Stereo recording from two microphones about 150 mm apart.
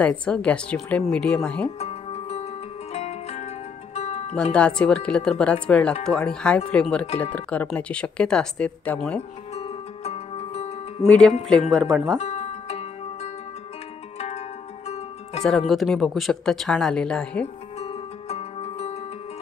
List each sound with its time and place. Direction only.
0.0 s speech: 10° left (ahead or behind)
1.8 s music: 45° left (ahead or behind)
4.4 s speech: 5° left (ahead or behind)
9.5 s music: 45° left (ahead or behind)
11.1 s speech: 5° left (ahead or behind)
12.2 s music: 45° left (ahead or behind)
15.4 s speech: centre (ahead or behind)
17.7 s music: 45° left (ahead or behind)